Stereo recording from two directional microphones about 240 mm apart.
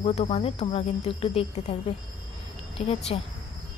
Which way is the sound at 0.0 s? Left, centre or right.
Left.